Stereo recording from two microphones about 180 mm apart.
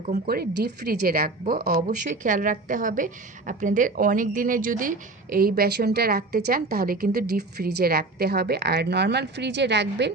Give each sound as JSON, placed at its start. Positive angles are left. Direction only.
{"t": 0.3, "sound": "a woman's voice", "side_deg": -60}